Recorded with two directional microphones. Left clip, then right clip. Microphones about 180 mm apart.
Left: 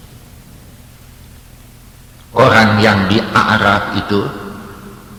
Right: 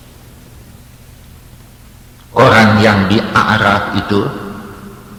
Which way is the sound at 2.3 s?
30° left (ahead or behind).